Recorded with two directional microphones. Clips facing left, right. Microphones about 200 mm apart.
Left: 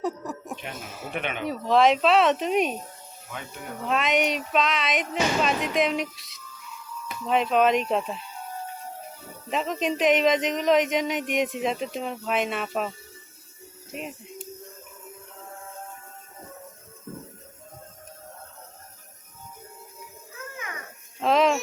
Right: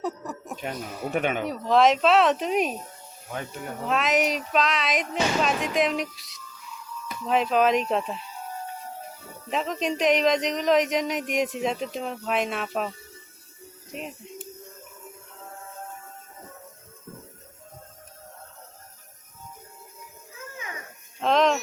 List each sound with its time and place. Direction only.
0.0 s a sound: centre (ahead or behind)
1.1 s speech: 45° right (ahead or behind)
1.5 s speech: centre (ahead or behind)
3.8 s speech: centre (ahead or behind)
9.5 s speech: centre (ahead or behind)
13.9 s speech: centre (ahead or behind)
21.2 s a sound: 5° left (ahead or behind)